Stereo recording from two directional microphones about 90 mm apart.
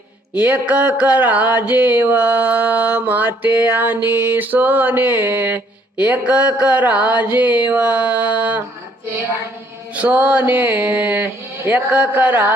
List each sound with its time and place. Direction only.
0.3 s mantra: 20° right (ahead or behind)
9.9 s mantra: 15° right (ahead or behind)